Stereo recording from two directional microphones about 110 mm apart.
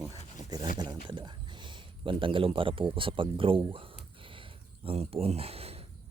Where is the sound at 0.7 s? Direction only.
45° right (ahead or behind).